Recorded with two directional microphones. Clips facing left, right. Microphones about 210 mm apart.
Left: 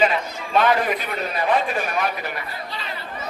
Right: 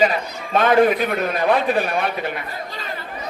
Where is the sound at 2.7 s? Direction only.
45° right (ahead or behind).